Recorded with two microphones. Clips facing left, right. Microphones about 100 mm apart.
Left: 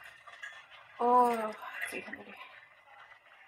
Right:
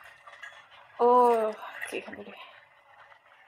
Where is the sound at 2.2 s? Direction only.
75° right (ahead or behind).